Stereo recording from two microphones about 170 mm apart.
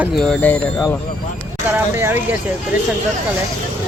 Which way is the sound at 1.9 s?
15° right (ahead or behind).